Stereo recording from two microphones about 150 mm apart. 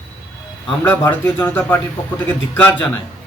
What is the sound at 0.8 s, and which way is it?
A man's voice, 15° left (ahead or behind).